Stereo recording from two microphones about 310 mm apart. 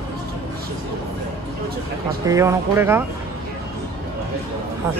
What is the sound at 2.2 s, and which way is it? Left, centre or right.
Speech, centre.